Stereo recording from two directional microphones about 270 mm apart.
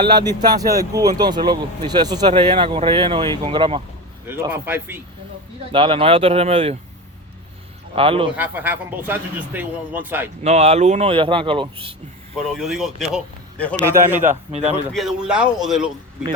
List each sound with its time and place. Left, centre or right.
0.0 s a man's voice: centre
4.3 s a man's voice: centre
5.7 s speech: centre
7.9 s speech: centre
8.4 s a man's voice: centre
10.4 s speech: right
12.5 s a man's voice: centre
13.8 s a man's voice: centre
14.5 s speech: right
14.9 s a man's voice: centre